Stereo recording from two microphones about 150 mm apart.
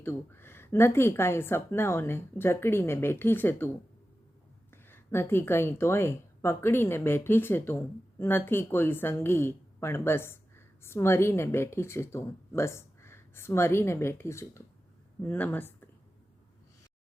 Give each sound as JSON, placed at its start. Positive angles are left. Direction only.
{"t": 0.0, "sound": "a woman's voice", "side_deg": 15}
{"t": 4.7, "sound": "speech", "side_deg": 15}